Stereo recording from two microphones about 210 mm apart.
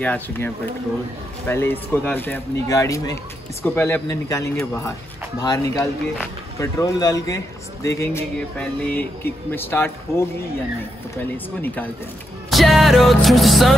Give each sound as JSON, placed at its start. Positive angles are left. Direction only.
{"t": 0.0, "sound": "a man's voice", "side_deg": 10}
{"t": 1.5, "sound": "a man's voice", "side_deg": 10}
{"t": 11.6, "sound": "a man's voice", "side_deg": 10}
{"t": 12.4, "sound": "music", "side_deg": 0}